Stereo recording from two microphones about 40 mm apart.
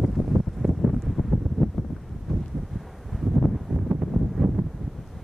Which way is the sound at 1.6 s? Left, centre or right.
Centre.